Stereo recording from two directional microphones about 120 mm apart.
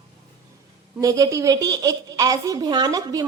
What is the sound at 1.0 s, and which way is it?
A woman's voice, 30° right (ahead or behind).